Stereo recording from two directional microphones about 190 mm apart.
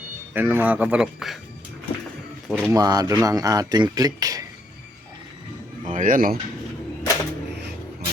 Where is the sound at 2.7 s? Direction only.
20° right (ahead or behind).